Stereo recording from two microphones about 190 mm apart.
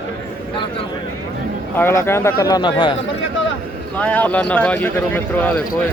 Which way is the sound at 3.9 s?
10° left (ahead or behind).